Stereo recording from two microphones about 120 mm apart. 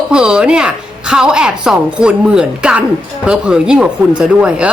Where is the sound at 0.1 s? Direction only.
5° right (ahead or behind).